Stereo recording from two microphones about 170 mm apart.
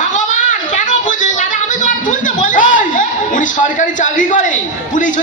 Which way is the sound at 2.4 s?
50° left (ahead or behind).